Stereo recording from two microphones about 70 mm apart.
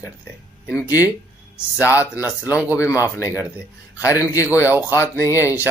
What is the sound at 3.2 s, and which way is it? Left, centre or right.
A man's voice, left.